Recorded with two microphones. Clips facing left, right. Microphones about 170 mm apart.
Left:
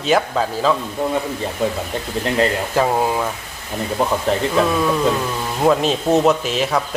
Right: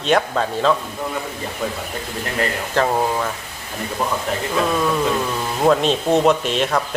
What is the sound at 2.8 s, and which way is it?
Speech, 10° left (ahead or behind).